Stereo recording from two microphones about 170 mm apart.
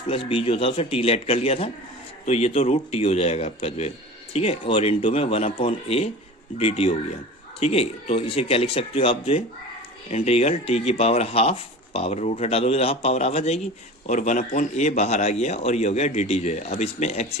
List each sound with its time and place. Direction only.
0.1 s a man's voice: 30° left (ahead or behind)